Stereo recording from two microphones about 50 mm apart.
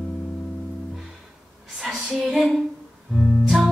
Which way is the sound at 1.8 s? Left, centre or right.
Centre.